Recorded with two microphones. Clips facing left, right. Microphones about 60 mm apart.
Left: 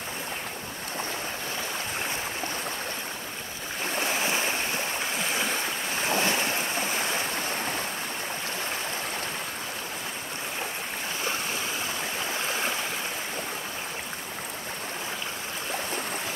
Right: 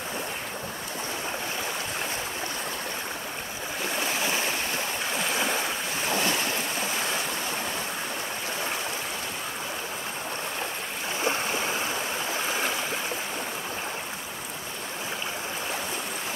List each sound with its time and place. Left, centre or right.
4.0 s stream: left
5.3 s stream: centre
6.0 s waves: left